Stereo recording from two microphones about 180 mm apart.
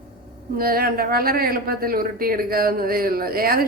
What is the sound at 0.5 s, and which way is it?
A woman's voice, 55° right (ahead or behind).